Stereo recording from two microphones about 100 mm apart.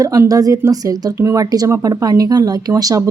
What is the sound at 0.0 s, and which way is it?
Speech, 35° right (ahead or behind).